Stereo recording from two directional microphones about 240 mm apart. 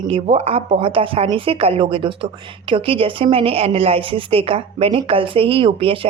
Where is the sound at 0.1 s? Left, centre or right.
Right.